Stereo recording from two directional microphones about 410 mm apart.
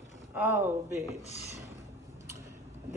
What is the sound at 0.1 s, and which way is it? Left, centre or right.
Speech, centre.